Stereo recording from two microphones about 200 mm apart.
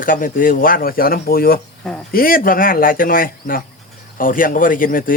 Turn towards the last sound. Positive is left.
turn(degrees=45)  # may be behind; listen again after turning